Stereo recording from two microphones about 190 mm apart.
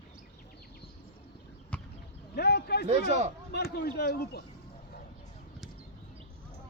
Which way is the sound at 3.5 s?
55° left (ahead or behind).